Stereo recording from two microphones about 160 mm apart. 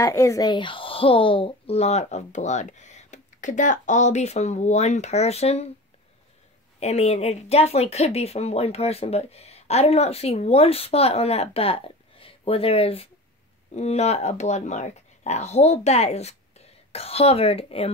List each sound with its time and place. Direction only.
0.0 s speech: 20° left (ahead or behind); by 5.7 s 40° left (ahead or behind)
6.8 s speech: 45° left (ahead or behind)